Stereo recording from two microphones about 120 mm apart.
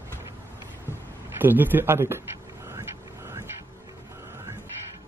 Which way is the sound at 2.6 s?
20° right (ahead or behind).